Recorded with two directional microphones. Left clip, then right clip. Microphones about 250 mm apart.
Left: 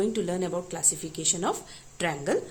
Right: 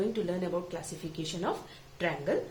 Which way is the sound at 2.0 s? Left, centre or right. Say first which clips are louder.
Left 3 dB; left.